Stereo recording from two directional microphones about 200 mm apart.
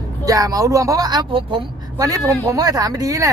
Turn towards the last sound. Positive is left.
turn(degrees=-15)  # may be behind; listen again after turning